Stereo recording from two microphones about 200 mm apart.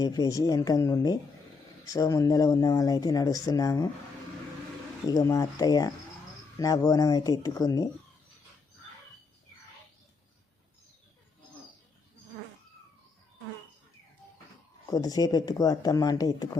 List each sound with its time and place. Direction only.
0.0 s speech: 20° left (ahead or behind)
5.0 s speech: 15° left (ahead or behind)
14.8 s speech: 20° left (ahead or behind)